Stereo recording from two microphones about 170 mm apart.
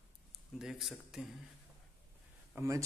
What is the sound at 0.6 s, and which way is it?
Speech, centre (ahead or behind).